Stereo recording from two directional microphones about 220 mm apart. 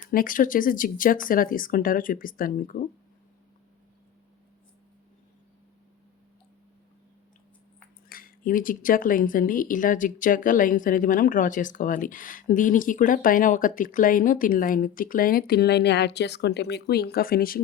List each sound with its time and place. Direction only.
0.0 s speech: 40° left (ahead or behind)
8.1 s speech: 40° left (ahead or behind)